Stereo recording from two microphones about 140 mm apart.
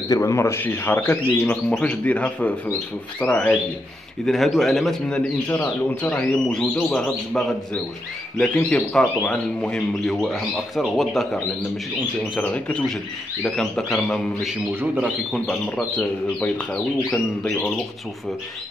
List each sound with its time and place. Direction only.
0.1 s speech: 20° left (ahead or behind); by 11.4 s centre (ahead or behind)
12.4 s speech: 10° left (ahead or behind)
16.0 s speech: 10° left (ahead or behind)